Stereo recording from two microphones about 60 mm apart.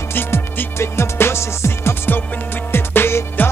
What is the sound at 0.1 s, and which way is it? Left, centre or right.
Music, left.